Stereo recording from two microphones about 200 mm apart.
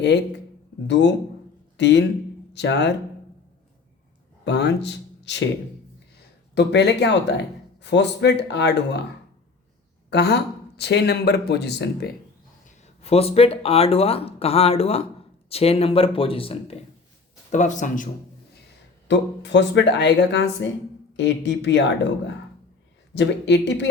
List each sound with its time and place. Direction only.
0.9 s a man's voice: 60° left (ahead or behind)
4.4 s speech: 60° left (ahead or behind)
6.5 s speech: 60° left (ahead or behind)
10.1 s speech: 55° left (ahead or behind)
12.6 s a man's voice: 30° left (ahead or behind)
19.0 s speech: 60° left (ahead or behind)